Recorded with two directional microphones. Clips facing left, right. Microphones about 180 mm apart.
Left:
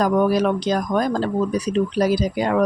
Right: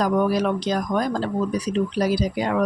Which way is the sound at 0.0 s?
50° left (ahead or behind).